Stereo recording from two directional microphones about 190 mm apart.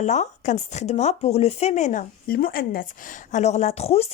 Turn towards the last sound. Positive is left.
turn(degrees=30)  # may be behind; listen again after turning